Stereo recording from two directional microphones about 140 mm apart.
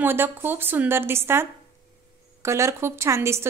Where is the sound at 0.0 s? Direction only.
15° right (ahead or behind).